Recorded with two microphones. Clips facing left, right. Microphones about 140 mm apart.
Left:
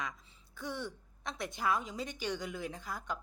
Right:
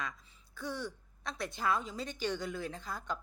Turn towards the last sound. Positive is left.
turn(degrees=10)  # may be behind; listen again after turning